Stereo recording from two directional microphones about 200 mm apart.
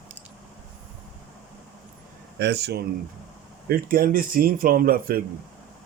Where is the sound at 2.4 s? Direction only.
55° right (ahead or behind).